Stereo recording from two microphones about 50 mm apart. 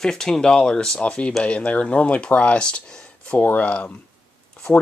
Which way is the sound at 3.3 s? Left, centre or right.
Left.